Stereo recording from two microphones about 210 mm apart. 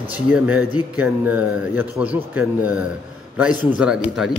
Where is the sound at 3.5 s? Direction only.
20° left (ahead or behind).